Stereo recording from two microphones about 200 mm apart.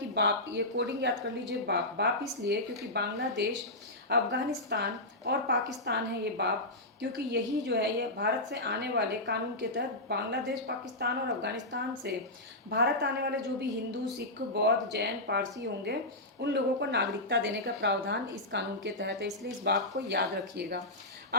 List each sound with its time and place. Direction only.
0.1 s a woman's voice: 60° right (ahead or behind)
14.5 s a woman's voice: 55° right (ahead or behind)